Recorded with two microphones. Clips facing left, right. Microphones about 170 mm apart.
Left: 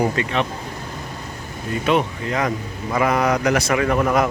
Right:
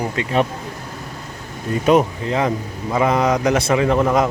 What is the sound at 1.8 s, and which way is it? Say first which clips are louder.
Speech: right 5 dB; 40° right (ahead or behind).